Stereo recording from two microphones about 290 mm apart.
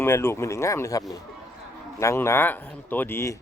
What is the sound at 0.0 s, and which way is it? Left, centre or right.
Speech, centre.